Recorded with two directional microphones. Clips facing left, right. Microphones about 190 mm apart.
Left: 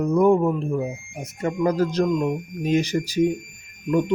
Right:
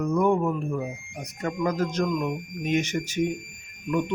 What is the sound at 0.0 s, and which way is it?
A man's voice, 35° left (ahead or behind).